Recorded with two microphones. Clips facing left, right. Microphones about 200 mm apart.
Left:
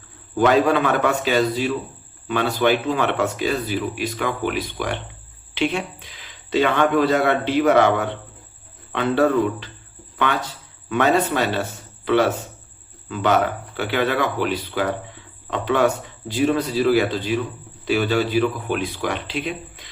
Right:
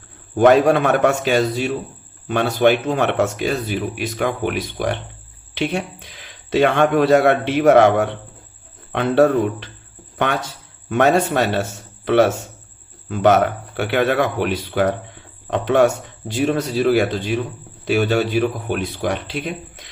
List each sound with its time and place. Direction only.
0.3 s speech: 50° right (ahead or behind)
10.8 s speech: 50° right (ahead or behind)